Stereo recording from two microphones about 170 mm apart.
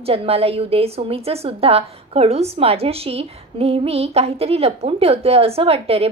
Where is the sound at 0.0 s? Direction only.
35° right (ahead or behind).